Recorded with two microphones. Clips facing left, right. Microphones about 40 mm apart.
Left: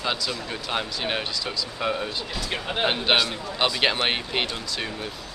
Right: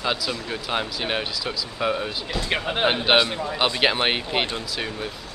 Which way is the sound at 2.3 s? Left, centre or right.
Right.